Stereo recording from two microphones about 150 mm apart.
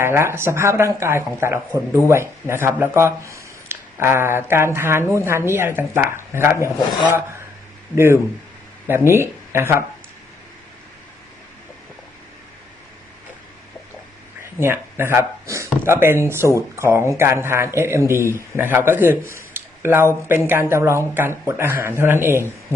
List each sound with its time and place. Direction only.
0.0 s speech: 15° right (ahead or behind)
7.9 s speech: 15° right (ahead or behind)
14.6 s speech: 15° right (ahead or behind)